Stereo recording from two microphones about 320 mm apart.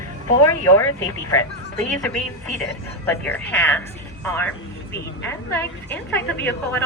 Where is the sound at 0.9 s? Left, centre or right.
Left.